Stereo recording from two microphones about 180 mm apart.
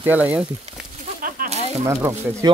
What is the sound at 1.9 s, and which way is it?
Speech, 15° right (ahead or behind).